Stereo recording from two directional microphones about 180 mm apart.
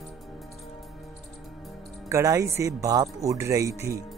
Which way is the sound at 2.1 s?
15° right (ahead or behind).